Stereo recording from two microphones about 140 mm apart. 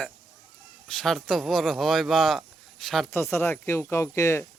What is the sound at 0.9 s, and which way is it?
Speech, 5° left (ahead or behind).